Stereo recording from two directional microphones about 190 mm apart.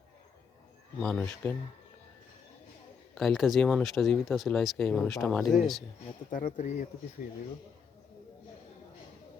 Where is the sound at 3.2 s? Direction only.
Centre (ahead or behind).